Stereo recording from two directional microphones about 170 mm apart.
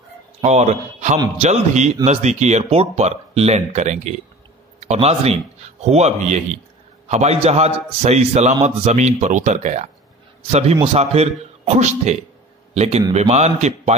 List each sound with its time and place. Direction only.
0.4 s a man's voice: 45° right (ahead or behind)